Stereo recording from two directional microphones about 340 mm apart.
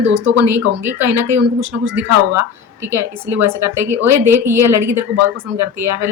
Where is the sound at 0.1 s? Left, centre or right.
Right.